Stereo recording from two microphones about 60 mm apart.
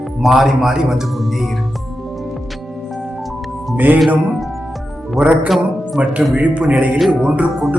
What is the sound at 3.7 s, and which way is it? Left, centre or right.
Speech, right.